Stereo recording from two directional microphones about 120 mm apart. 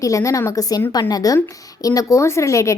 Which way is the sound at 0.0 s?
25° left (ahead or behind).